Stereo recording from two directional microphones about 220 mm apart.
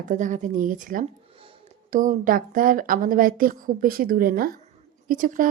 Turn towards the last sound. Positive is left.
turn(degrees=-40)  # may be behind; listen again after turning